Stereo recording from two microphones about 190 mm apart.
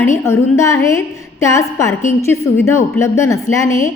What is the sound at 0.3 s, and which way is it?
A woman's voice, 15° left (ahead or behind).